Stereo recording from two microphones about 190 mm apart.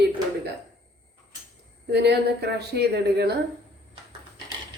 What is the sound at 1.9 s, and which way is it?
A woman's voice, 60° right (ahead or behind).